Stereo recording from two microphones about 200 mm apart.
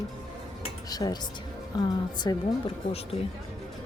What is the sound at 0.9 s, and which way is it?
Speech, 20° left (ahead or behind).